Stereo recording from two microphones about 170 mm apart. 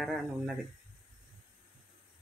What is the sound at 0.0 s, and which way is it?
Speech, centre (ahead or behind).